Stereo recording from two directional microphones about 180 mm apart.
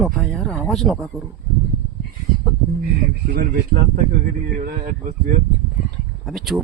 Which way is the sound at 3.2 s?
55° right (ahead or behind).